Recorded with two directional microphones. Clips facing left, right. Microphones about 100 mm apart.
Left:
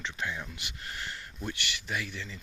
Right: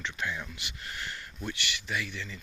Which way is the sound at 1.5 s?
40° left (ahead or behind).